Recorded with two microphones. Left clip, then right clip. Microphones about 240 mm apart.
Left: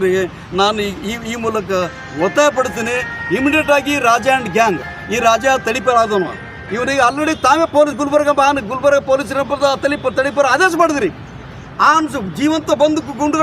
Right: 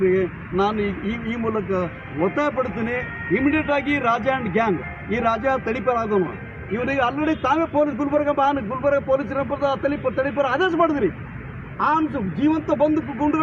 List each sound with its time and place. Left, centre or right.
0.1 s speech: left